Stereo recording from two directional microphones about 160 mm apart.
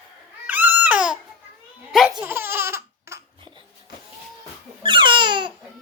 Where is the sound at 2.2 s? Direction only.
15° right (ahead or behind).